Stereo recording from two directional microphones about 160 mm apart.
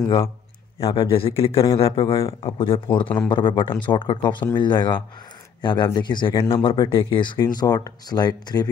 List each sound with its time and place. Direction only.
0.7 s speech: 35° left (ahead or behind)